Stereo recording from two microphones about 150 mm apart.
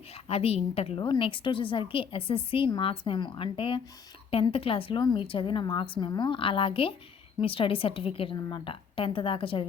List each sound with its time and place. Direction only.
0.3 s a woman's voice: 40° left (ahead or behind)